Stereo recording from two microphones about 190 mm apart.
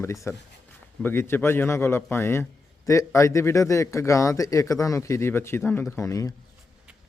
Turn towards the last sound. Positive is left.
turn(degrees=15)  # may be behind; listen again after turning